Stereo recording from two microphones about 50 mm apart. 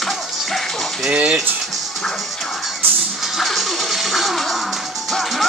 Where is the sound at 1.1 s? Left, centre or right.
Right.